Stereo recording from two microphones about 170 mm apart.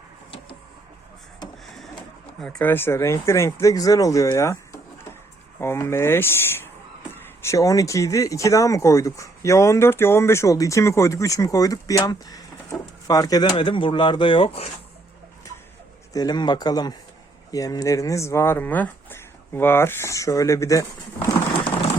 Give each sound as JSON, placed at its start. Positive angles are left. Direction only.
{"t": 1.6, "sound": "printer", "side_deg": 0}
{"t": 2.4, "sound": "speech", "side_deg": 5}
{"t": 16.1, "sound": "speech", "side_deg": 25}